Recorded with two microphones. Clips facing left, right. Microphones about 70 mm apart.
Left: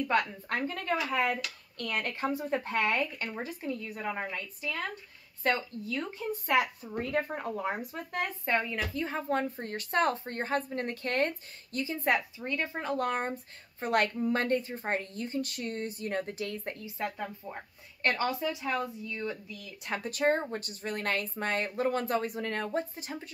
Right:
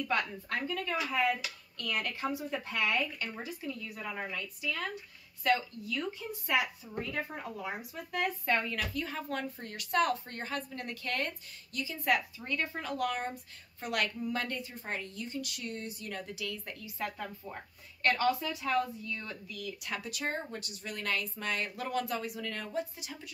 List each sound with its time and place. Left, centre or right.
0.5 s a woman's voice: left
8.2 s a woman's voice: left